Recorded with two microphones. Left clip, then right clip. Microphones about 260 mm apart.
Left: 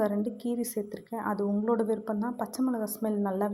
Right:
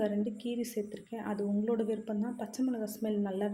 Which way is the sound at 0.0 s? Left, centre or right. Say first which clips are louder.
Left 4 dB; centre.